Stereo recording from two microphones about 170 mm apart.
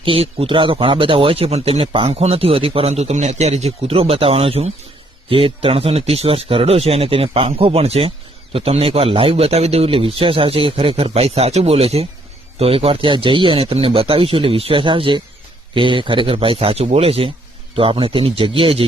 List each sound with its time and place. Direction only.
0.0 s speech: 35° right (ahead or behind)